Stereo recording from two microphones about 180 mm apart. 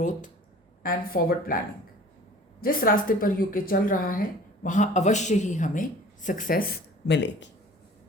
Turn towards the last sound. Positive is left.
turn(degrees=75)  # may be behind; listen again after turning